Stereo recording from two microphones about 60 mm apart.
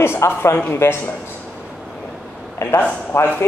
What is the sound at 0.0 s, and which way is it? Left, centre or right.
Speech, left.